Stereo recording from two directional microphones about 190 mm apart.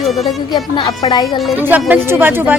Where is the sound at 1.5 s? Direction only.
10° right (ahead or behind).